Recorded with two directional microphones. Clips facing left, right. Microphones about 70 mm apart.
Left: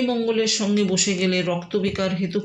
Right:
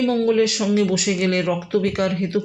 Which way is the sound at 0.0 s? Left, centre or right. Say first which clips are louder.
Right 3 dB; right.